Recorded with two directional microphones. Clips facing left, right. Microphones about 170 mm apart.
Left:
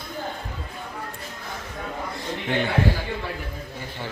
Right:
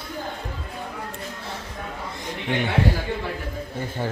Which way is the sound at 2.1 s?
15° right (ahead or behind).